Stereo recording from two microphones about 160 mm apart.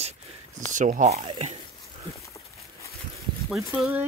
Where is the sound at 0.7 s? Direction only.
50° right (ahead or behind).